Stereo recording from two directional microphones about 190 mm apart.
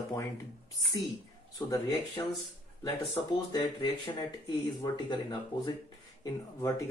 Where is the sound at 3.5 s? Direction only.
20° left (ahead or behind).